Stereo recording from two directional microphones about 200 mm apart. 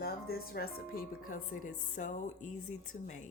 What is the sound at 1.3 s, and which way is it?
Speech, 40° left (ahead or behind).